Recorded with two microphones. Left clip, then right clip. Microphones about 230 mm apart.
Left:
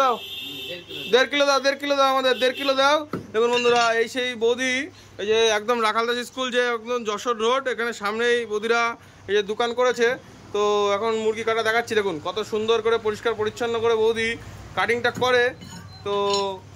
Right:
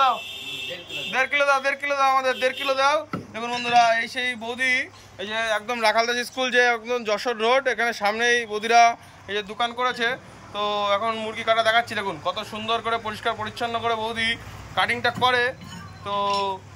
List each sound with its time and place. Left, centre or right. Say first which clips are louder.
1.1 s speech: left 2 dB; left